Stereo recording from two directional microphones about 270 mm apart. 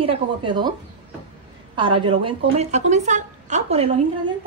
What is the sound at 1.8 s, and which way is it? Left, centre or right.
A woman's voice, centre.